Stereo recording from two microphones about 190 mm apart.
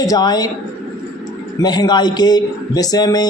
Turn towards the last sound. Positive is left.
turn(degrees=20)  # may be behind; listen again after turning